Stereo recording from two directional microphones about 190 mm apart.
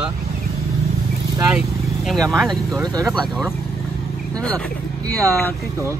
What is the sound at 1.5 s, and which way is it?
Vehicle, centre (ahead or behind).